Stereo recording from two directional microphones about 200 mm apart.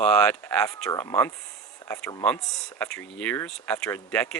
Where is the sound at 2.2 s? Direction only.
5° left (ahead or behind).